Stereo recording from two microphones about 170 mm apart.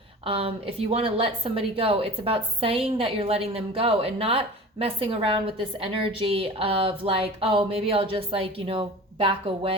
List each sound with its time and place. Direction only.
0.3 s a woman's voice: 35° right (ahead or behind)